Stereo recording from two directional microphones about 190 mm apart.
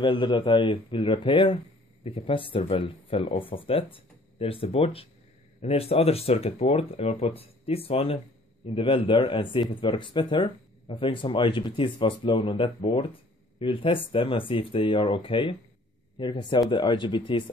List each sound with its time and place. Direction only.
0.0 s speech: 25° left (ahead or behind)